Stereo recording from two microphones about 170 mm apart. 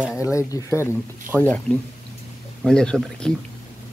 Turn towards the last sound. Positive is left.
turn(degrees=5)  # may be behind; listen again after turning